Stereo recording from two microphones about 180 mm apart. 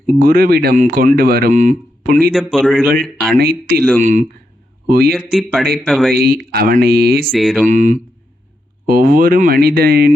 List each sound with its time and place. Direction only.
0.1 s speech: 50° right (ahead or behind)
2.3 s speech: centre (ahead or behind)
3.3 s speech: 55° right (ahead or behind)
3.8 s speech: 5° left (ahead or behind)
4.0 s speech: 45° right (ahead or behind)
4.9 s speech: 55° right (ahead or behind)
5.1 s speech: centre (ahead or behind)
6.2 s speech: 55° right (ahead or behind)
7.3 s speech: centre (ahead or behind)
7.7 s speech: 45° right (ahead or behind)